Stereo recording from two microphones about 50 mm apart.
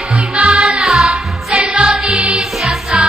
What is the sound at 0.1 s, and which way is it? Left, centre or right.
Music, right.